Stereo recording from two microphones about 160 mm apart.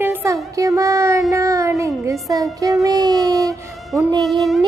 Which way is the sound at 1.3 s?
20° right (ahead or behind).